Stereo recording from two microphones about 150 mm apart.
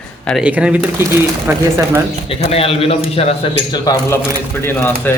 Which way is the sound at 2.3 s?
40° left (ahead or behind).